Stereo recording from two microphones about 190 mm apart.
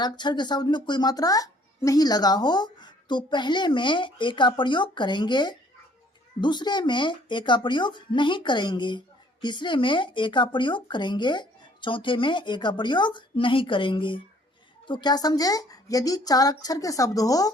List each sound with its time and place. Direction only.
0.0 s speech: 25° left (ahead or behind)